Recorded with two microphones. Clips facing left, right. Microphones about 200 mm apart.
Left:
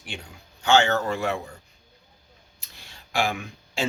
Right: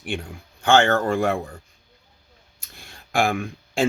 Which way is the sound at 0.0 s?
55° right (ahead or behind).